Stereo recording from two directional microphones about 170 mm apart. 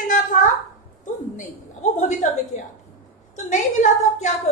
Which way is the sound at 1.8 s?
45° left (ahead or behind).